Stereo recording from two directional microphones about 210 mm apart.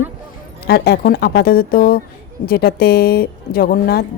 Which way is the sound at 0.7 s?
45° left (ahead or behind).